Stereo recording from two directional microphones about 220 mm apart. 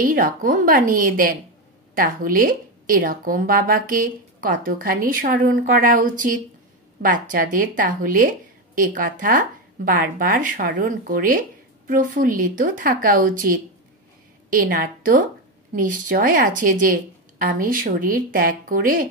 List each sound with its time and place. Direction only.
0.0 s a woman's voice: 40° right (ahead or behind)